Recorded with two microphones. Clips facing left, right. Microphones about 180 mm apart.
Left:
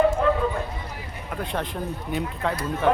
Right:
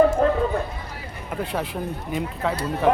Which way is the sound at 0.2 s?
40° right (ahead or behind).